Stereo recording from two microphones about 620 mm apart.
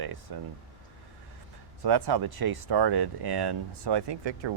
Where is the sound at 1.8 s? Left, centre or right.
Right.